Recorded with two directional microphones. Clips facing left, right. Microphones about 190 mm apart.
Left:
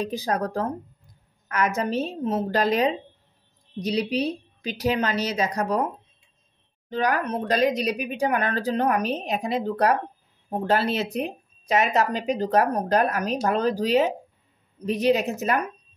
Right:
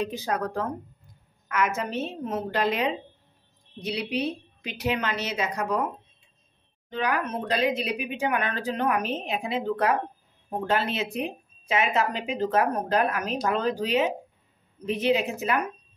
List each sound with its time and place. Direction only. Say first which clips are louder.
0.0 s speech: left 2 dB; 40° left (ahead or behind)
6.9 s speech: left 3 dB; 40° left (ahead or behind)